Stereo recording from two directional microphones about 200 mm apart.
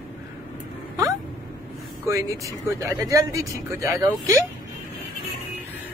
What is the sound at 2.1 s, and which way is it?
Speech, 15° right (ahead or behind).